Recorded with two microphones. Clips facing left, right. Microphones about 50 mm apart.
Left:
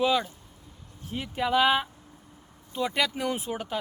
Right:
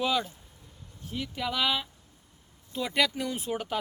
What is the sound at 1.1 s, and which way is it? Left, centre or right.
Speech, left.